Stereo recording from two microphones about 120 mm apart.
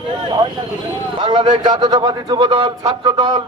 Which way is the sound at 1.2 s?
45° right (ahead or behind).